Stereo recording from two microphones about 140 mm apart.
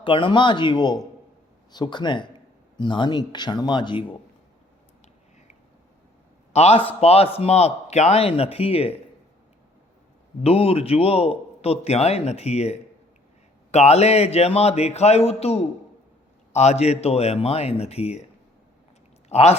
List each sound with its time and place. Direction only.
0.0 s speech: 35° left (ahead or behind)
6.5 s a man's voice: 50° left (ahead or behind)
10.4 s a man's voice: 45° left (ahead or behind)
19.3 s speech: 50° left (ahead or behind)